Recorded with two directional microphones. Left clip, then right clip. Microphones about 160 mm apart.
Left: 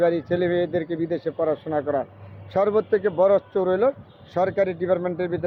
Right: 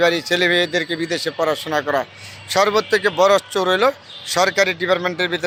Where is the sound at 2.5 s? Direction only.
5° right (ahead or behind).